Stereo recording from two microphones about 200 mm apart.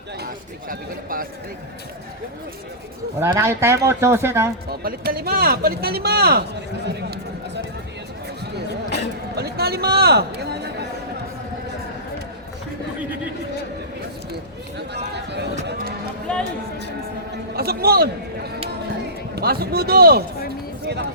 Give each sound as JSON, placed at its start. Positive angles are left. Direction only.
{"t": 0.7, "sound": "speech", "side_deg": -45}
{"t": 3.2, "sound": "speech", "side_deg": -10}
{"t": 4.7, "sound": "speech", "side_deg": -50}
{"t": 9.3, "sound": "a sound", "side_deg": -55}
{"t": 14.8, "sound": "a sound", "side_deg": -55}
{"t": 16.3, "sound": "speech", "side_deg": 5}
{"t": 17.5, "sound": "a man's voice", "side_deg": -50}
{"t": 19.4, "sound": "speech", "side_deg": -50}